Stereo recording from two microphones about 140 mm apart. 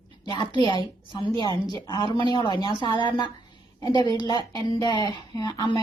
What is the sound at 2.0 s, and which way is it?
Speech, 40° right (ahead or behind).